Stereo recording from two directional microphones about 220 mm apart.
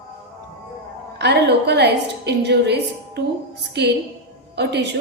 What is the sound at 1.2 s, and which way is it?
A woman's voice, 50° right (ahead or behind).